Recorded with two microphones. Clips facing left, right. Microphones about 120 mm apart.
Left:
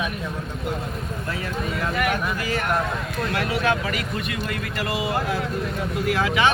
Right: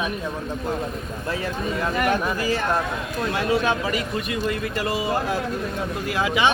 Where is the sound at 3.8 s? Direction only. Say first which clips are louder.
Right 2 dB; 25° right (ahead or behind).